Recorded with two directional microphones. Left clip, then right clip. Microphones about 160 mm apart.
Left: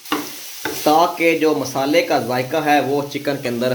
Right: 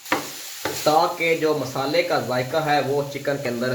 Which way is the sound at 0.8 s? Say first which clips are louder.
Left 4 dB; 90° left.